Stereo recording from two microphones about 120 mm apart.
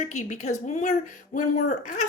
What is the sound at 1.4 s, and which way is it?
Speech, 90° left.